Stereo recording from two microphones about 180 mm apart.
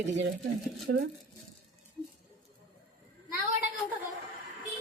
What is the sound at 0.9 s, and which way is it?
Speech, 60° right (ahead or behind).